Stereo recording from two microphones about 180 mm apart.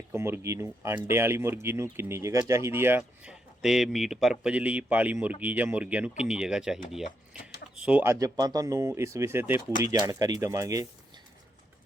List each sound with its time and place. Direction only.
0.1 s speech: 15° right (ahead or behind)